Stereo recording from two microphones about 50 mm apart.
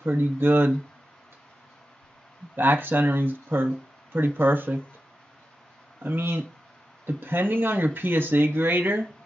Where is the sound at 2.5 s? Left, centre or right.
Right.